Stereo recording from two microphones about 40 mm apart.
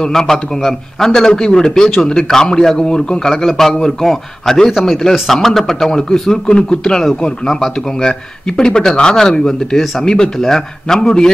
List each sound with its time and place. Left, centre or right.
0.1 s a man's voice: centre